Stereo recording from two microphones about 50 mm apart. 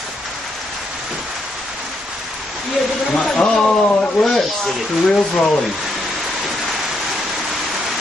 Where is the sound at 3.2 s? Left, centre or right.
Centre.